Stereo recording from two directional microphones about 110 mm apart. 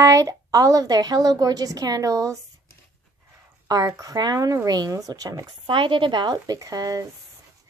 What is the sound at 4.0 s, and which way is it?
A woman's voice, 35° right (ahead or behind).